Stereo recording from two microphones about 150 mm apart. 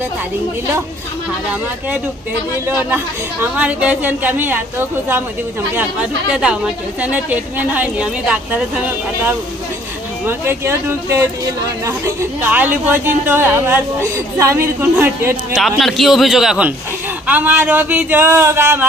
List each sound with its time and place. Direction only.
2.9 s speech: 10° right (ahead or behind)
15.6 s a man's voice: centre (ahead or behind); by 18.9 s 15° right (ahead or behind)